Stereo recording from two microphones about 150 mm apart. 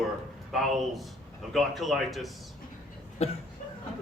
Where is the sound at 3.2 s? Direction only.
45° left (ahead or behind).